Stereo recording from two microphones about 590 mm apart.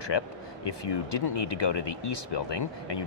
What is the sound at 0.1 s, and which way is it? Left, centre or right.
Speech, left.